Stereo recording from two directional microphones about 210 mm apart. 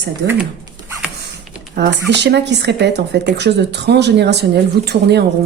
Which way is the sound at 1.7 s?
50° right (ahead or behind).